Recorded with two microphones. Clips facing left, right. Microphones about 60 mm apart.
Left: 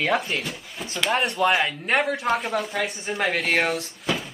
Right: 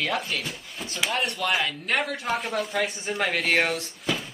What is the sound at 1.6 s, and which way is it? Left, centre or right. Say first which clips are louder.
Speech: left 4 dB; centre.